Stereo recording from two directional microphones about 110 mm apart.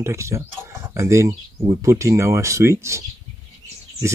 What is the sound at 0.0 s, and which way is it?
Speech, 25° right (ahead or behind).